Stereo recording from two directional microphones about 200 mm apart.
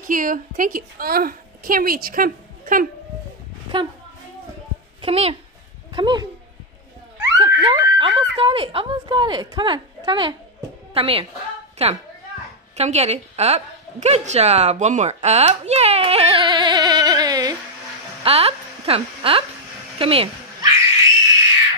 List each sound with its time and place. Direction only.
0.0 s a woman's voice: 40° right (ahead or behind)
3.7 s speech: 25° right (ahead or behind)
5.0 s speech: 30° right (ahead or behind)
7.3 s a woman's voice: 25° right (ahead or behind)
18.2 s speech: 30° right (ahead or behind)
20.0 s dog: 25° right (ahead or behind)